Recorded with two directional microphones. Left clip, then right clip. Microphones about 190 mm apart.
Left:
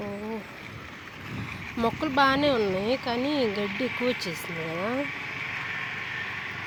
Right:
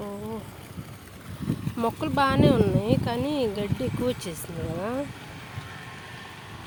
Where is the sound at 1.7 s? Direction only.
10° right (ahead or behind).